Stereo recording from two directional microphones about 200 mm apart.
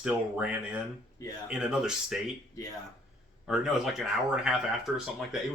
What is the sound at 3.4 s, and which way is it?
Speech, centre (ahead or behind).